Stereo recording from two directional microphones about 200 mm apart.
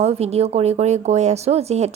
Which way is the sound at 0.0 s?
30° right (ahead or behind).